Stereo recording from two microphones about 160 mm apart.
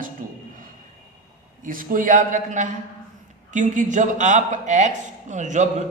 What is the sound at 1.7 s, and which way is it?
A man's voice, 55° right (ahead or behind).